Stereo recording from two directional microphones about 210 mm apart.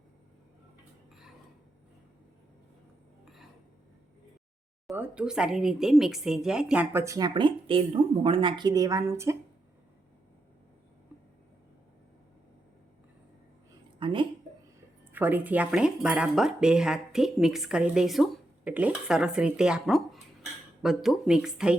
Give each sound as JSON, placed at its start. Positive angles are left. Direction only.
{"t": 4.9, "sound": "speech", "side_deg": -5}
{"t": 14.0, "sound": "a sound", "side_deg": -25}
{"t": 15.1, "sound": "speech", "side_deg": -10}